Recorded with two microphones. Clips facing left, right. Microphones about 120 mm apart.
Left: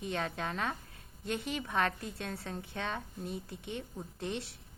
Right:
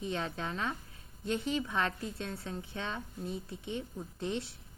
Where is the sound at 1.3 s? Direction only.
60° left (ahead or behind).